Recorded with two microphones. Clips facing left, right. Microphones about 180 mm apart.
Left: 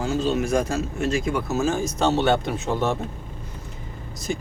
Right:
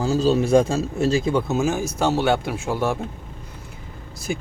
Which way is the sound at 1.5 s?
10° right (ahead or behind).